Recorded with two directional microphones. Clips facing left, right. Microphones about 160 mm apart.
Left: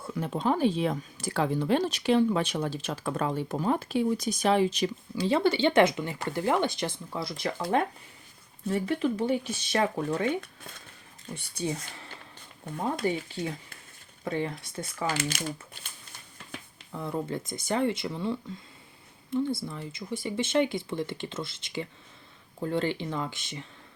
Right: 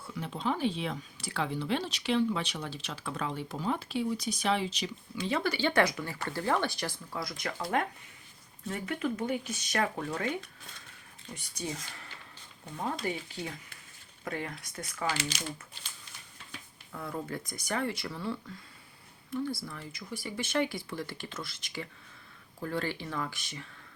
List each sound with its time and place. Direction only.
0.1 s speech: 45° left (ahead or behind)
5.1 s speech: 30° left (ahead or behind)
11.3 s speech: 30° left (ahead or behind)
13.0 s speech: 25° left (ahead or behind)
14.3 s speech: 25° left (ahead or behind)
15.0 s speech: 50° left (ahead or behind)
16.9 s speech: 25° left (ahead or behind)